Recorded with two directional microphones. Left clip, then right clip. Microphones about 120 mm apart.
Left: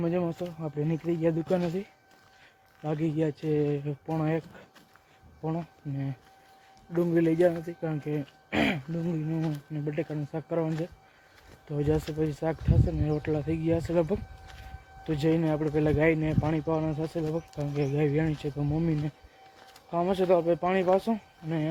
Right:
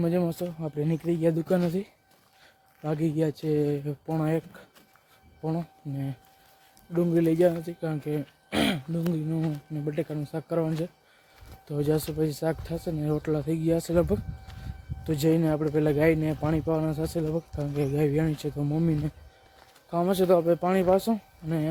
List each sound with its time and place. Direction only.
0.0 s speech: 30° right (ahead or behind)
2.8 s speech: 35° right (ahead or behind)
6.9 s speech: 15° right (ahead or behind)
7.7 s speech: 20° right (ahead or behind); by 21.7 s 35° right (ahead or behind)